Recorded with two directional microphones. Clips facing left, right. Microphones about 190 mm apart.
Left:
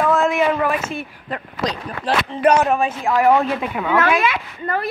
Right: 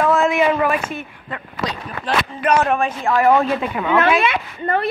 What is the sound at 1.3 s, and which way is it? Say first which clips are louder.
Speech: left 3 dB; 35° left (ahead or behind).